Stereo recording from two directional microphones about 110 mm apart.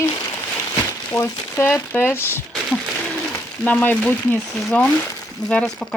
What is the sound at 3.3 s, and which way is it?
Frying, 15° left (ahead or behind).